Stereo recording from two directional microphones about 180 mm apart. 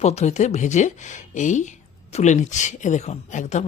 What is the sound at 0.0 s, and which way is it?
Speech, 35° left (ahead or behind).